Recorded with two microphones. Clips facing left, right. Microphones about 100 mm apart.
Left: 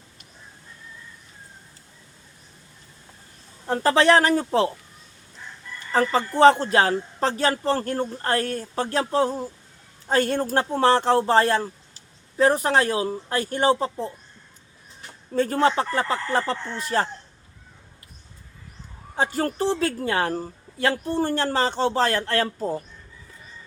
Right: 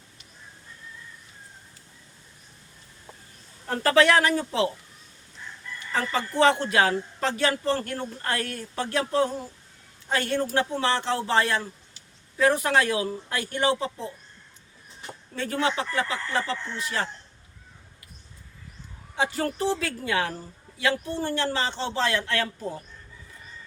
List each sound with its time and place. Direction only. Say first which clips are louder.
3.7 s speech: left 2 dB; 25° left (ahead or behind)
5.9 s speech: left 6 dB; 35° left (ahead or behind)
15.3 s speech: left 6 dB; 40° left (ahead or behind)
19.1 s a woman's voice: left 3 dB; 40° left (ahead or behind)